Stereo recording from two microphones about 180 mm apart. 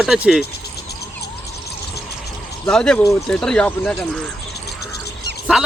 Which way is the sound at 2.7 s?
5° left (ahead or behind).